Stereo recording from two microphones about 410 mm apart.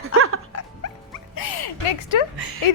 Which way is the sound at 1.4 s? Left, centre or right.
Left.